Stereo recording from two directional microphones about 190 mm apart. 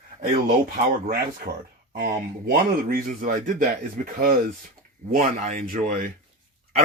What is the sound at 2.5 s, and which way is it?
Speech, 45° right (ahead or behind).